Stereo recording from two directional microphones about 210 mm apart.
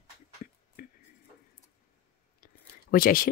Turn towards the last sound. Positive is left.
turn(degrees=45)  # may be behind; listen again after turning